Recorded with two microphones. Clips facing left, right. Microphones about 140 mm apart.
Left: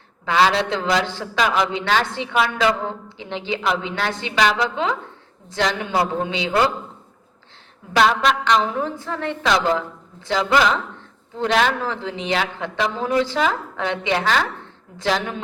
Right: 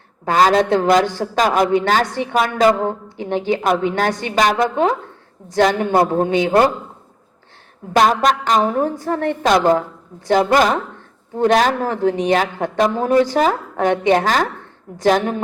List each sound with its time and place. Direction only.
0.3 s a man's voice: 45° right (ahead or behind)
7.9 s a man's voice: 45° right (ahead or behind)